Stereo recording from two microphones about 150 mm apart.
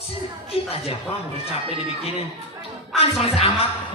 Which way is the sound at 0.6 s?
40° left (ahead or behind).